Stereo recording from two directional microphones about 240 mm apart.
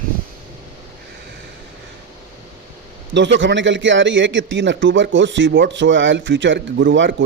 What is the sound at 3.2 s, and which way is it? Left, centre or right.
A man's voice, right.